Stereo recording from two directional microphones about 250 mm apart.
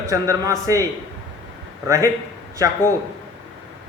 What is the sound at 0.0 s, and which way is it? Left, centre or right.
Speech, centre.